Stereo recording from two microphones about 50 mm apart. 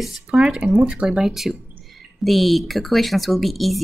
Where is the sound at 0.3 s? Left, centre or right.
Right.